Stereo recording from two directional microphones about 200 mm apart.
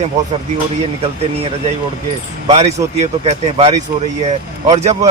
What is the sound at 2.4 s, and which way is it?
A man's voice, 30° right (ahead or behind).